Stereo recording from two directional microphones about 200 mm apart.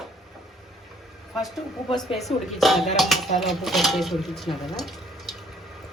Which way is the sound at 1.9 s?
Centre (ahead or behind).